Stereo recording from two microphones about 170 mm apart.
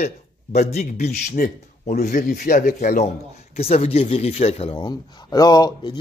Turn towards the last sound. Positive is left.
turn(degrees=25)  # may be behind; listen again after turning